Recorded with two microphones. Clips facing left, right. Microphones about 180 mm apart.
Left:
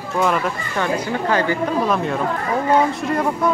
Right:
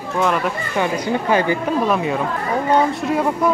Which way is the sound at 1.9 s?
5° right (ahead or behind).